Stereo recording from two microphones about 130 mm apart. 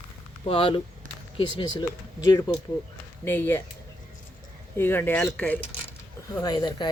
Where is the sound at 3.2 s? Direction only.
15° left (ahead or behind).